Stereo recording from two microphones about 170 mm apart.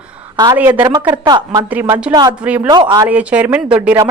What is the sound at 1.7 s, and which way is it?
Speech, 10° right (ahead or behind).